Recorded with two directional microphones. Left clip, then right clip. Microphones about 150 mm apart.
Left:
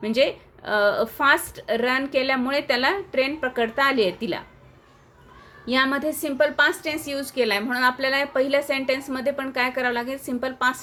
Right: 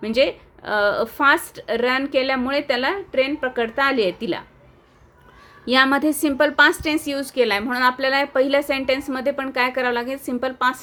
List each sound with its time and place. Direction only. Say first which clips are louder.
0.0 s a woman's voice: right 2 dB; 20° right (ahead or behind)
5.6 s a woman's voice: right 5 dB; 40° right (ahead or behind); by 10.8 s 25° right (ahead or behind)